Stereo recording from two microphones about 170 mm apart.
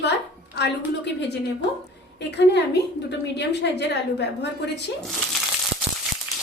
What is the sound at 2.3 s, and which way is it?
A woman's voice, 80° left.